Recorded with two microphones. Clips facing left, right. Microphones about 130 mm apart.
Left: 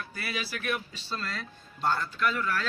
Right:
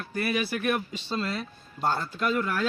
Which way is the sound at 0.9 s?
20° right (ahead or behind).